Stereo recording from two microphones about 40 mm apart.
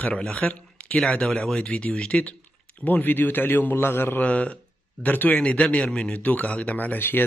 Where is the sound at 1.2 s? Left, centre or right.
Centre.